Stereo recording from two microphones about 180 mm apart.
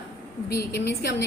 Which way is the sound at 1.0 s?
65° left (ahead or behind).